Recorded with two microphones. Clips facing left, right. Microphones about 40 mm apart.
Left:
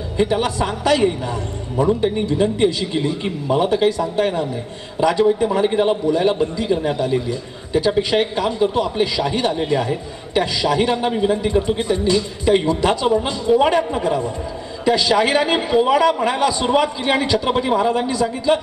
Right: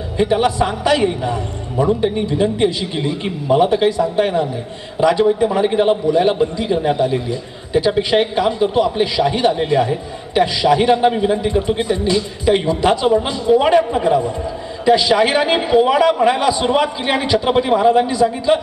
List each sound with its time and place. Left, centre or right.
0.2 s a man's voice: centre